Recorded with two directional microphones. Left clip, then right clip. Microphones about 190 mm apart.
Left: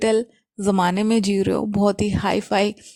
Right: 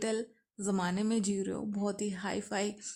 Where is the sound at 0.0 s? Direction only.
45° left (ahead or behind).